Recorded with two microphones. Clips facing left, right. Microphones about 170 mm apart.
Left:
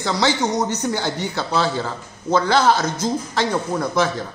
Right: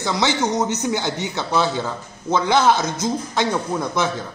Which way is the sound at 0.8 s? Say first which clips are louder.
Even; 15° right (ahead or behind).